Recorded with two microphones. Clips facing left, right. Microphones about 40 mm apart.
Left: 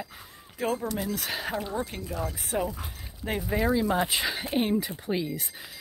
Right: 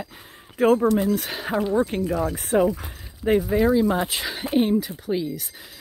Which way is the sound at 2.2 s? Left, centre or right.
Right.